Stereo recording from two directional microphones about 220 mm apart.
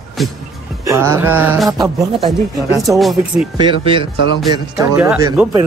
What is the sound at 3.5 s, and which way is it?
Speech, 20° right (ahead or behind).